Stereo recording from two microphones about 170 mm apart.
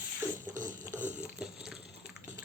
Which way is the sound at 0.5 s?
50° right (ahead or behind).